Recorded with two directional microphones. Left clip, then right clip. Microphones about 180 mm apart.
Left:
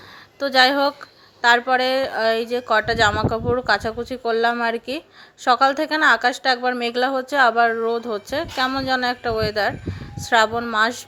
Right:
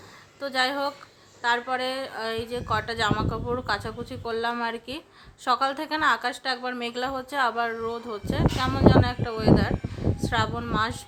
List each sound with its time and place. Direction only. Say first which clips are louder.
0.3 s a woman's voice: left 10 dB; 40° left (ahead or behind)